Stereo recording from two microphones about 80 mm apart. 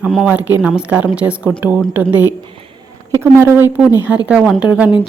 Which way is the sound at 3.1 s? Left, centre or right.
Right.